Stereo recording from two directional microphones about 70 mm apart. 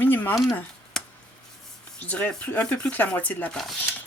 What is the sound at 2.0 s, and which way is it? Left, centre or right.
Speech, left.